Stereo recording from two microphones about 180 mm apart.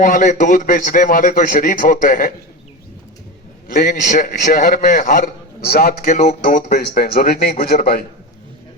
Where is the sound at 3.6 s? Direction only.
45° left (ahead or behind).